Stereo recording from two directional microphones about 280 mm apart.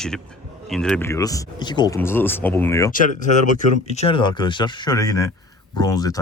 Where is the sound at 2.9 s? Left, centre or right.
Left; by 6.2 s centre.